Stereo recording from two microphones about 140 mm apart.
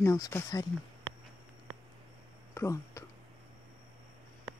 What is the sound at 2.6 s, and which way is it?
Speech, 20° left (ahead or behind).